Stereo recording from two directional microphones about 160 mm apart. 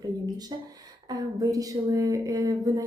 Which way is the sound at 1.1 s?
20° right (ahead or behind).